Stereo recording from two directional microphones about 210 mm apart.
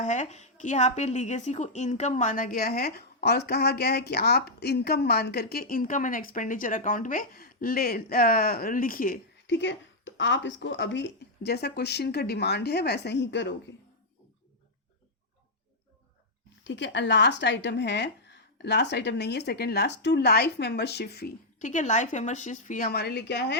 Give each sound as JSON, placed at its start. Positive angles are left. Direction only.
{"t": 0.0, "sound": "a woman's voice", "side_deg": 35}
{"t": 9.5, "sound": "a woman's voice", "side_deg": 55}
{"t": 16.6, "sound": "a woman's voice", "side_deg": 60}